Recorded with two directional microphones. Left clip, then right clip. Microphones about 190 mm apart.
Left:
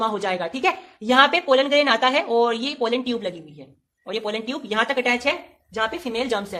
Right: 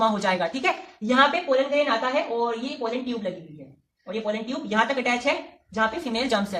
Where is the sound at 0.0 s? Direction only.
20° left (ahead or behind).